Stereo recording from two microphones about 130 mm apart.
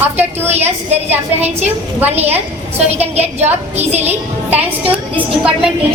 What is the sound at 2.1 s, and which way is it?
A woman's voice, 55° right (ahead or behind).